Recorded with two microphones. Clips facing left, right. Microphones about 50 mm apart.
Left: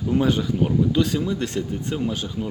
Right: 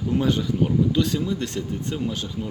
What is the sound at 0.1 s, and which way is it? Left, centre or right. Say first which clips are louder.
Speech: left 2 dB; centre.